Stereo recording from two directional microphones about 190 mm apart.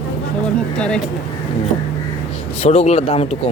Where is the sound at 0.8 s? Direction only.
5° left (ahead or behind).